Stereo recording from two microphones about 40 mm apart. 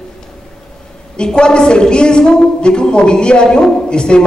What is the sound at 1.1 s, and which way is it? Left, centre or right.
A woman's voice, left.